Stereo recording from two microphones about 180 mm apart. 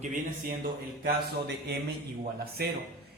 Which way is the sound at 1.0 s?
65° right (ahead or behind).